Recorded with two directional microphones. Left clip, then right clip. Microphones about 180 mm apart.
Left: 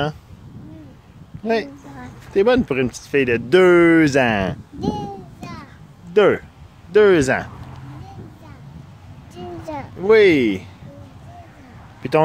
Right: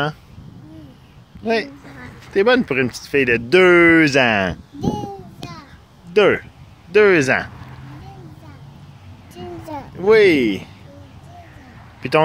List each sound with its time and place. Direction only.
1.4 s a woman's voice: 5° left (ahead or behind)
4.7 s a sound: 10° right (ahead or behind)
6.1 s speech: 10° left (ahead or behind)
9.3 s a sound: centre (ahead or behind)
9.9 s speech: 5° left (ahead or behind)
12.0 s speech: 5° left (ahead or behind)